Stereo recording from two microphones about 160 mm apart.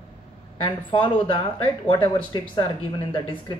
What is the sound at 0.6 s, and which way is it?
A woman's voice, 30° left (ahead or behind).